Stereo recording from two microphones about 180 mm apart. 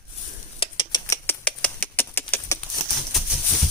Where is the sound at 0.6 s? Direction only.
30° left (ahead or behind).